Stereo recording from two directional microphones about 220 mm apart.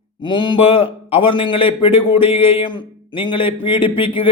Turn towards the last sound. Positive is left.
turn(degrees=25)  # may be behind; listen again after turning